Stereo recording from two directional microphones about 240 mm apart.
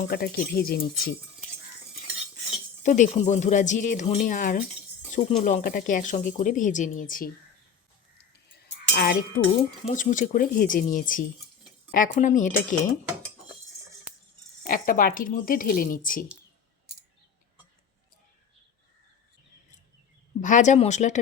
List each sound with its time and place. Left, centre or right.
0.1 s speech: left
2.8 s speech: left
8.6 s chink: left
9.9 s speech: left
14.7 s speech: left
20.4 s speech: left